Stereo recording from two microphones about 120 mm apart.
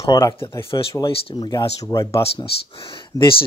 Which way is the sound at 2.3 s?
45° left (ahead or behind).